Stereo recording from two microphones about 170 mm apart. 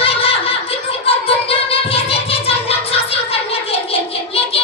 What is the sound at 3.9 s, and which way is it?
Child singing, 35° left (ahead or behind).